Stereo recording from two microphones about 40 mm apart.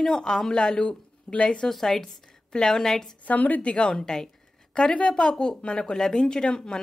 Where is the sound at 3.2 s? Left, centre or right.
Left.